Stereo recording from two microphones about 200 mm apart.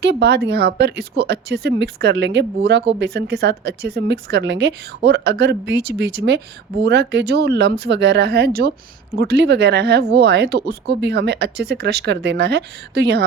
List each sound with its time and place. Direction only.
0.0 s speech: 60° right (ahead or behind)